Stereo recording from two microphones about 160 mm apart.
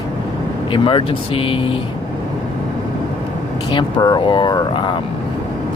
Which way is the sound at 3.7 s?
25° left (ahead or behind).